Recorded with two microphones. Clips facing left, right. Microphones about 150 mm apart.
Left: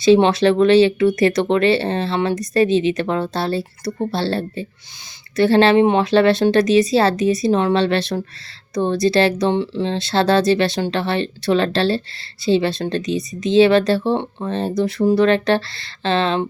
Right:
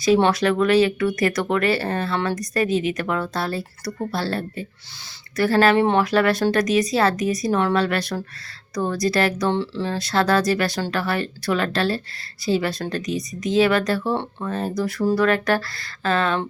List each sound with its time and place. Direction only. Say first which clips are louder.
0.0 s speech: left 5 dB; 25° left (ahead or behind)